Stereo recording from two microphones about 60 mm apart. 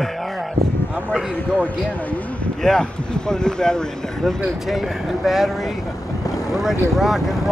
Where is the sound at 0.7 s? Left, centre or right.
Left.